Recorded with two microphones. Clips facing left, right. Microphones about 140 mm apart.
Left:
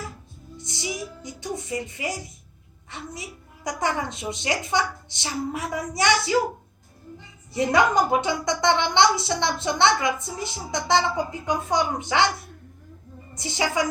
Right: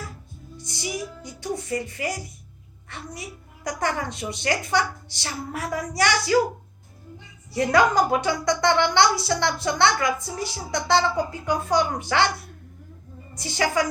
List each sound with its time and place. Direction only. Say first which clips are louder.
0.5 s a woman's voice: right 1 dB; 20° left (ahead or behind)
7.5 s a woman's voice: right 1 dB; 20° left (ahead or behind)
13.3 s a woman's voice: right 1 dB; 20° left (ahead or behind)